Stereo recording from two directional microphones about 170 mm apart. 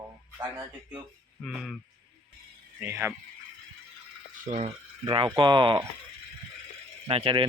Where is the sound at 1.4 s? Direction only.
5° left (ahead or behind).